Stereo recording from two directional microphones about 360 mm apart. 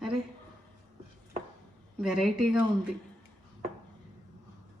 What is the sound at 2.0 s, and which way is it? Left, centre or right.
Speech, centre.